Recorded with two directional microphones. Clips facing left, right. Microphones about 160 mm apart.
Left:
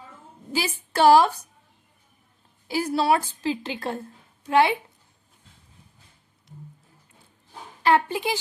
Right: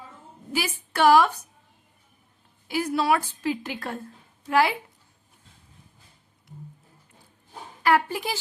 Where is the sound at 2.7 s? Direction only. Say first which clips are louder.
Left 1 dB; 30° left (ahead or behind).